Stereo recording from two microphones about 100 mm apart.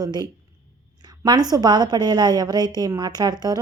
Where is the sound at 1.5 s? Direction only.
45° right (ahead or behind).